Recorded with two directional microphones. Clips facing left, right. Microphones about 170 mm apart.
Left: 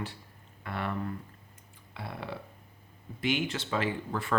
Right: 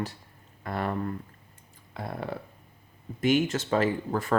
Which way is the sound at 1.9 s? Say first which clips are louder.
Right 5 dB; 45° right (ahead or behind).